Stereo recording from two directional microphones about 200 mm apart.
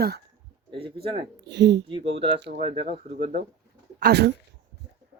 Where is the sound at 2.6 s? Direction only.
30° right (ahead or behind).